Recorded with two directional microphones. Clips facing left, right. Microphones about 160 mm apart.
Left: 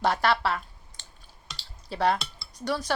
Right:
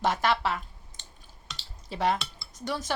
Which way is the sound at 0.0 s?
20° right (ahead or behind).